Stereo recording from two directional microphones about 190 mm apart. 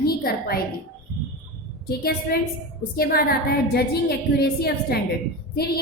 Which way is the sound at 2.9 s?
50° left (ahead or behind).